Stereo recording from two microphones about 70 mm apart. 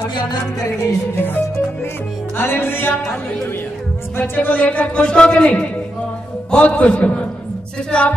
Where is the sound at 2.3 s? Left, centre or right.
Left.